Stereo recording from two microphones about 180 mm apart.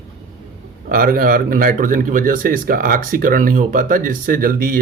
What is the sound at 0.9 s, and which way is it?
Speech, 55° right (ahead or behind).